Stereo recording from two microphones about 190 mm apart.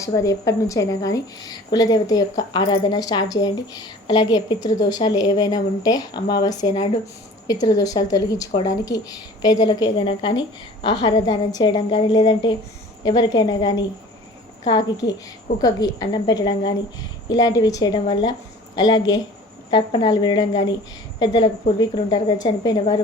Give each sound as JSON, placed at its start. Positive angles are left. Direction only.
{"t": 0.0, "sound": "speech", "side_deg": 15}